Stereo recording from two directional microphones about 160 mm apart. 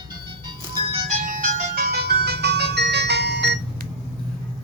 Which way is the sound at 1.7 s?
75° right (ahead or behind).